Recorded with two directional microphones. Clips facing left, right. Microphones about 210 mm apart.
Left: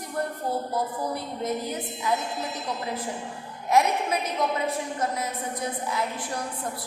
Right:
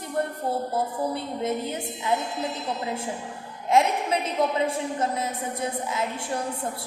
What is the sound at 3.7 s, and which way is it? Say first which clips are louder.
A woman's voice: right 1 dB; 25° right (ahead or behind).